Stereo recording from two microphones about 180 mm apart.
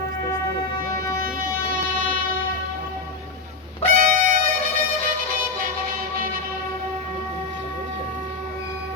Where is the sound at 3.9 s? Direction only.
50° right (ahead or behind).